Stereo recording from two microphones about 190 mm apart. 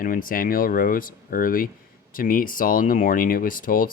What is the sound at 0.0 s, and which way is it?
Speech, 45° left (ahead or behind).